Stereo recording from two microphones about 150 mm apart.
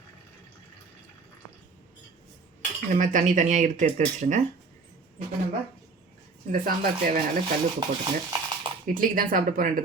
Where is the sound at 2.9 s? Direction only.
55° right (ahead or behind).